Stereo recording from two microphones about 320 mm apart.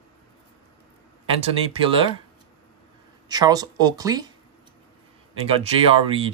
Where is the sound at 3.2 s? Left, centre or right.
Centre.